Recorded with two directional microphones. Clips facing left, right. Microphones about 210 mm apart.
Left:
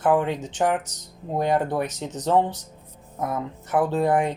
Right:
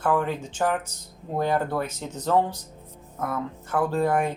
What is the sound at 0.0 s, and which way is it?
Speech, 20° left (ahead or behind).